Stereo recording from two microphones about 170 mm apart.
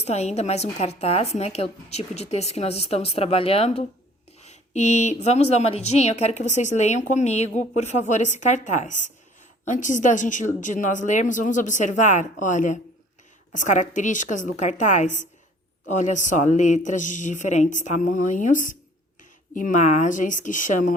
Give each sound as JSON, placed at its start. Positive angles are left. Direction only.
{"t": 0.0, "sound": "a woman's voice", "side_deg": 40}